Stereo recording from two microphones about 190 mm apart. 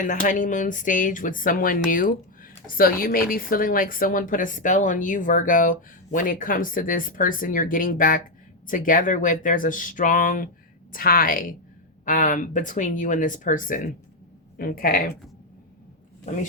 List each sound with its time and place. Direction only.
0.0 s speech: 45° left (ahead or behind)